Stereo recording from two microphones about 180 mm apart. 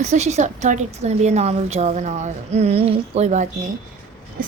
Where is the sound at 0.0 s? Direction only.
40° right (ahead or behind).